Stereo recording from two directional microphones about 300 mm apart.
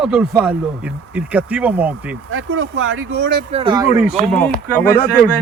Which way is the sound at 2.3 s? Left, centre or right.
Right.